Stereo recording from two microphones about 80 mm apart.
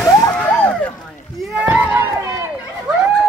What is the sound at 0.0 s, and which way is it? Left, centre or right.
Vehicle, left.